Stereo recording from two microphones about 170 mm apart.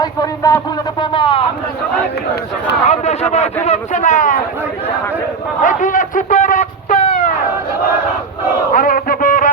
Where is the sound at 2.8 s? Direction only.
40° left (ahead or behind).